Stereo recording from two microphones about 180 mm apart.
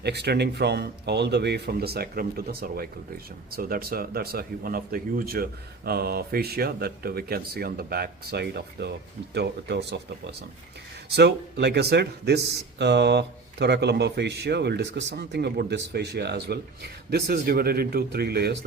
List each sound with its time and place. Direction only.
0.0 s speech: 65° right (ahead or behind)
11.1 s speech: 70° right (ahead or behind)